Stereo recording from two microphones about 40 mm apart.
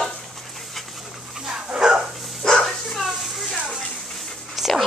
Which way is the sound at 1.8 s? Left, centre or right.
Centre.